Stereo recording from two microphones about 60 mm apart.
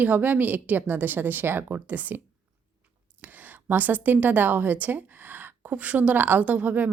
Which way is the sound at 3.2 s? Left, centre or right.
Right.